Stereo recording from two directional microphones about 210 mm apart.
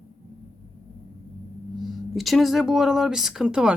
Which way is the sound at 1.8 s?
Centre (ahead or behind).